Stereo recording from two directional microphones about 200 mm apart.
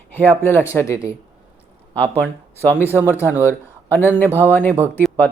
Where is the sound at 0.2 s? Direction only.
10° left (ahead or behind).